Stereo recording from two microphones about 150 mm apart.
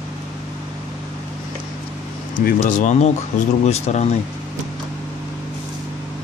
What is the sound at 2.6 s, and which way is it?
Speech, 50° left (ahead or behind).